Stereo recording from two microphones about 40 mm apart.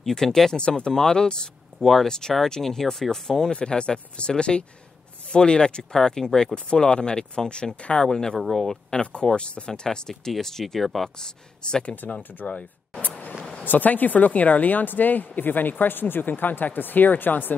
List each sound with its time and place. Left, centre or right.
0.0 s speech: centre
0.6 s speech: left
1.8 s speech: centre
9.0 s speech: left
9.8 s speech: centre
11.1 s speech: centre
12.2 s a woman's voice: left
12.4 s speech: left
13.4 s a sound: centre
13.7 s a woman's voice: left